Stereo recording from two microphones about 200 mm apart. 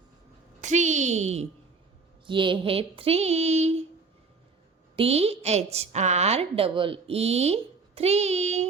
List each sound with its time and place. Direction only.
0.6 s a woman's voice: 35° right (ahead or behind)
2.2 s a sound: 25° right (ahead or behind)
4.9 s a woman's voice: 30° right (ahead or behind)